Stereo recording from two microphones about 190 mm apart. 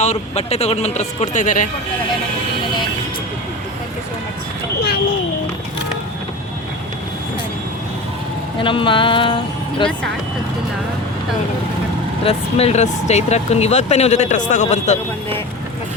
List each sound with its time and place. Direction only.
0.0 s speech: 35° left (ahead or behind)
8.6 s speech: 25° left (ahead or behind)
12.2 s speech: 30° left (ahead or behind)